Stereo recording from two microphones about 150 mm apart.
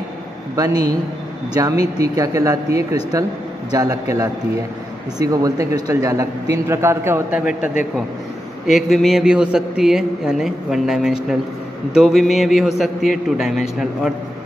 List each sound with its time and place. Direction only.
0.6 s a man's voice: 25° right (ahead or behind); by 14.1 s centre (ahead or behind)